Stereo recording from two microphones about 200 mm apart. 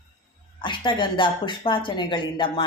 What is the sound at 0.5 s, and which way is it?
Speech, 25° left (ahead or behind).